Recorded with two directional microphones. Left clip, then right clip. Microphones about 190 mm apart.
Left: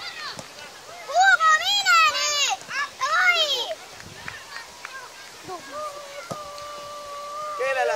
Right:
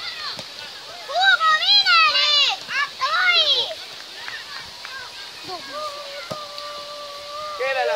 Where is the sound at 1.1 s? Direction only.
50° left (ahead or behind).